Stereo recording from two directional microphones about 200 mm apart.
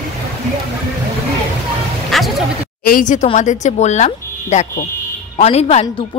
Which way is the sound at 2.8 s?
40° left (ahead or behind).